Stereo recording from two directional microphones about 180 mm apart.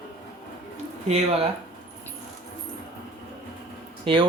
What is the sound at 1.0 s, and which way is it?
Speech, 35° right (ahead or behind).